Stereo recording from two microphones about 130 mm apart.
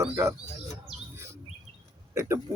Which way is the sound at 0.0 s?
20° right (ahead or behind).